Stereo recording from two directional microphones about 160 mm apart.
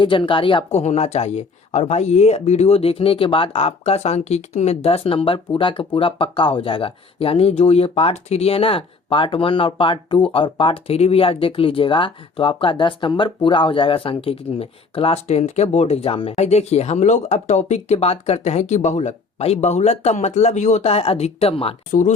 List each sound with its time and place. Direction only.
0.0 s speech: 30° left (ahead or behind)